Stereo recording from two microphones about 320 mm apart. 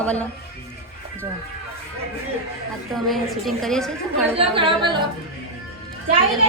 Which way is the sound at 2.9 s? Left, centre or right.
Centre.